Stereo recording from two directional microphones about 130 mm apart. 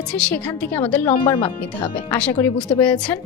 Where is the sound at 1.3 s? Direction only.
45° left (ahead or behind).